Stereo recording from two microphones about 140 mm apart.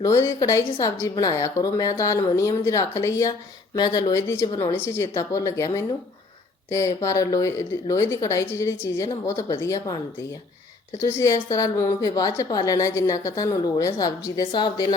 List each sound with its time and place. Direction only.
0.0 s a woman's voice: 20° left (ahead or behind)
11.0 s a woman's voice: 20° left (ahead or behind)